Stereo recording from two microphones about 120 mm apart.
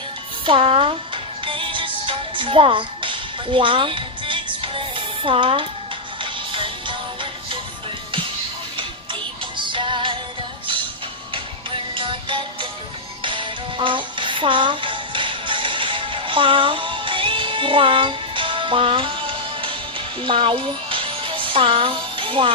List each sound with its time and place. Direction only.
0.4 s music: 50° right (ahead or behind)
9.6 s music: 40° right (ahead or behind)
11.3 s music: 45° right (ahead or behind)